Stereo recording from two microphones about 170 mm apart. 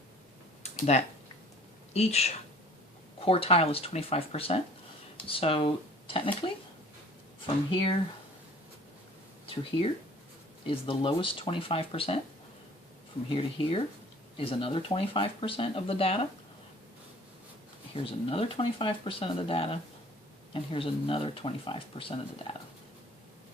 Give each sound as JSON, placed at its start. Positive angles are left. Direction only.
{"t": 0.6, "sound": "a sound", "side_deg": 40}
{"t": 1.9, "sound": "a woman's voice", "side_deg": 40}
{"t": 10.7, "sound": "speech", "side_deg": 30}
{"t": 13.3, "sound": "speech", "side_deg": 35}
{"t": 17.9, "sound": "speech", "side_deg": 30}